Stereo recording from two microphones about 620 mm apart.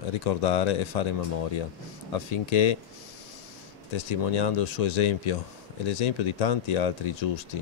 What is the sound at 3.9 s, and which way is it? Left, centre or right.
Speech, left.